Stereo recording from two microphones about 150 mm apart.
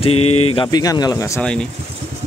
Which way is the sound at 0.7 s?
25° left (ahead or behind).